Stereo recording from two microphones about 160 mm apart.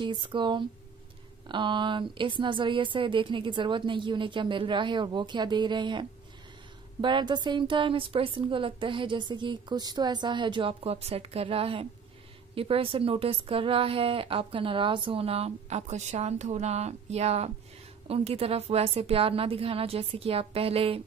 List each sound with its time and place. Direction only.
0.0 s a woman's voice: 30° right (ahead or behind)